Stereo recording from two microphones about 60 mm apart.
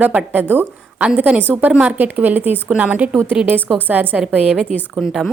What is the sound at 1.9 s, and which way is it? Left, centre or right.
A woman's voice, right.